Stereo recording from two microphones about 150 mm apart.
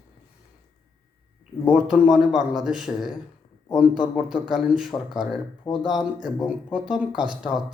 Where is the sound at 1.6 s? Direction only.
5° right (ahead or behind).